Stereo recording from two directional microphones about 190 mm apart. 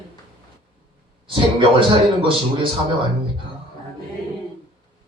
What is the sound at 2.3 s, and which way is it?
Speech, 25° right (ahead or behind).